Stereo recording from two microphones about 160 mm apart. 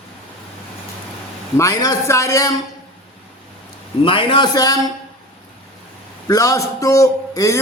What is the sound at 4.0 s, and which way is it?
Speech, 35° left (ahead or behind).